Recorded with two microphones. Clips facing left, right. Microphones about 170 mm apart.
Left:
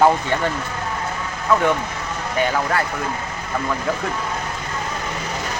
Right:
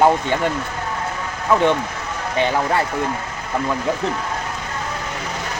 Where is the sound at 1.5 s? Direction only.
25° right (ahead or behind).